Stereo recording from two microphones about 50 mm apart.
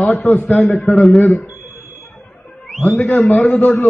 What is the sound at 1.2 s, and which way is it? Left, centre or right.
Speech, left.